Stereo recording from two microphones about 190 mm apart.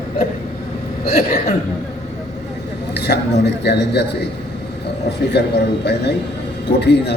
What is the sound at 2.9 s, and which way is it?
A man's voice, 60° left (ahead or behind).